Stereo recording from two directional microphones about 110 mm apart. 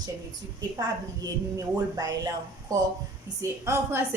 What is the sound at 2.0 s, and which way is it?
Speech, 35° right (ahead or behind).